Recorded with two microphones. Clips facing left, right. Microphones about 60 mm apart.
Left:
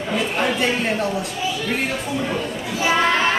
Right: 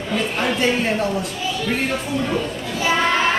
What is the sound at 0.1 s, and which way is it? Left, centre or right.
A child's voice, centre.